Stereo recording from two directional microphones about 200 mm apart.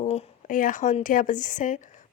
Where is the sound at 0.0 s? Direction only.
35° left (ahead or behind).